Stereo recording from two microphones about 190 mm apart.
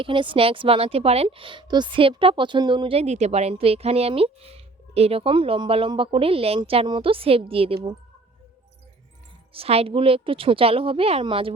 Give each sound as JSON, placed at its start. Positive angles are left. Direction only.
{"t": 0.0, "sound": "a woman's voice", "side_deg": -25}
{"t": 9.5, "sound": "a woman's voice", "side_deg": -30}